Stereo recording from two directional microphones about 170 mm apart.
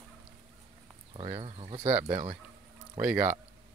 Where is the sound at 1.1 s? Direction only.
30° right (ahead or behind).